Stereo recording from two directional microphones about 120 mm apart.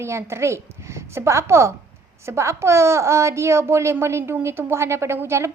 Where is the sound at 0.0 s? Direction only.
25° right (ahead or behind).